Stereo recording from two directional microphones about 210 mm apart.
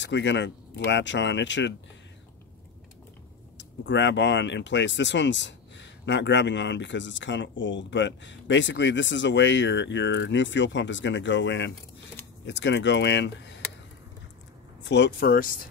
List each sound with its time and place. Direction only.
0.0 s speech: 60° left (ahead or behind)
3.5 s speech: 60° left (ahead or behind)
14.8 s speech: 55° left (ahead or behind)